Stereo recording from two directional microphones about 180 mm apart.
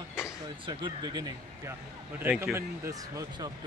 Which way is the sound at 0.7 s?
25° right (ahead or behind).